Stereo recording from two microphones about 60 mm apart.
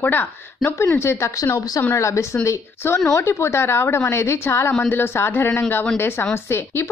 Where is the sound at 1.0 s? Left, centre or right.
Left.